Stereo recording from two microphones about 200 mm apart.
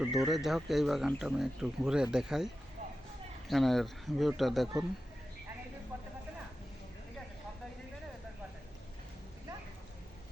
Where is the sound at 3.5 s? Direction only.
Centre (ahead or behind).